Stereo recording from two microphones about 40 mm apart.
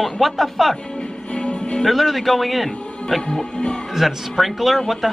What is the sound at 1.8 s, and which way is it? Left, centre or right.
Speech, centre.